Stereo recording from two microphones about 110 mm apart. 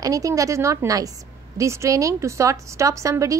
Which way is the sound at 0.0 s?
30° right (ahead or behind).